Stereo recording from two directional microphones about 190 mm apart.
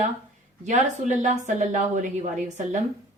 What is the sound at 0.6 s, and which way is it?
A woman's voice, 40° right (ahead or behind).